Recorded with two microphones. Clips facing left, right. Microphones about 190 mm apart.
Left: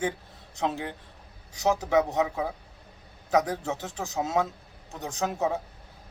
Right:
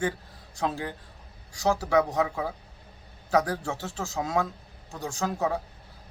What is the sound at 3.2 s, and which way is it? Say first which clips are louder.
Speech: even; 20° left (ahead or behind).